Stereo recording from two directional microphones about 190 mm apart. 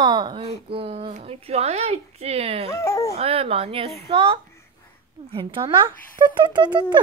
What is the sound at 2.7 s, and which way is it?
Speech, 15° left (ahead or behind).